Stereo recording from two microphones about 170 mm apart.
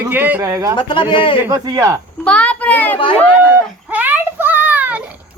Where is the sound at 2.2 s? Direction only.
5° left (ahead or behind).